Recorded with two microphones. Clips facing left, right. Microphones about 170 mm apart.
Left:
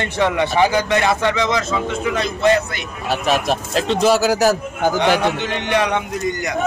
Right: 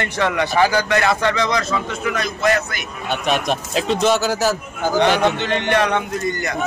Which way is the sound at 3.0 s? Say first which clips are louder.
Left 2 dB; centre (ahead or behind).